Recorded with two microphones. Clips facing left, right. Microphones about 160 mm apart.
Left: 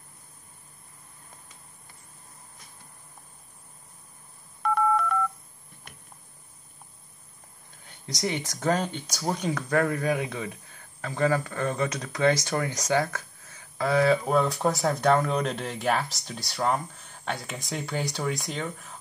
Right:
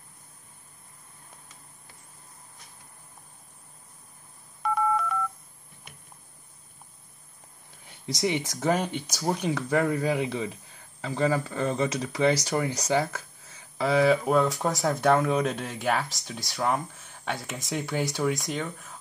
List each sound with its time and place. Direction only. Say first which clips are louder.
4.6 s telephone dialing: left 2 dB; 5° right (ahead or behind)
8.3 s speech: even; 10° right (ahead or behind)